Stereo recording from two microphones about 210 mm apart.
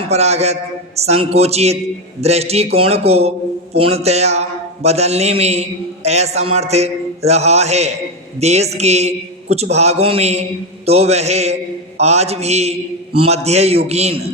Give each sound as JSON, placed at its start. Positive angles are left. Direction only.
{"t": 0.1, "sound": "a man's voice", "side_deg": -30}